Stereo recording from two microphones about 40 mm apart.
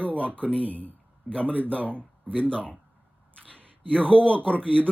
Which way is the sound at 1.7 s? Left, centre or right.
Right.